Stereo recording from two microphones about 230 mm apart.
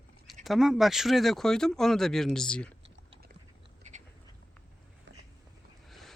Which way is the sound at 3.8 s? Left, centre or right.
Right.